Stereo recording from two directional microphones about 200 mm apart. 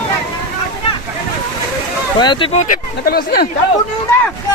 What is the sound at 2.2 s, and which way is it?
Speech, 25° left (ahead or behind).